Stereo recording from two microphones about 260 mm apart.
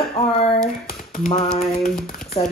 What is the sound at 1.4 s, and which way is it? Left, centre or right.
Speech, centre.